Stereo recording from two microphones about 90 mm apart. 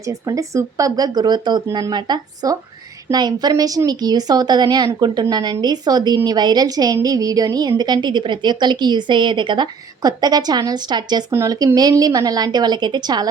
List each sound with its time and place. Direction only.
0.0 s a woman's voice: 40° right (ahead or behind)
3.5 s a woman's voice: 40° right (ahead or behind)